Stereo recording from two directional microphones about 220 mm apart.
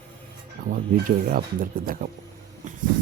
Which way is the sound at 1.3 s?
40° right (ahead or behind).